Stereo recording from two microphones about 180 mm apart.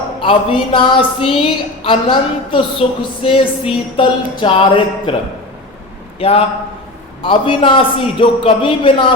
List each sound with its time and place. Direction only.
0.2 s a woman's voice: 30° left (ahead or behind)
6.1 s a man's voice: 30° left (ahead or behind)